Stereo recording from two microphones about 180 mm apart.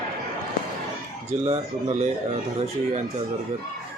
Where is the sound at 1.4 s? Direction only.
35° right (ahead or behind).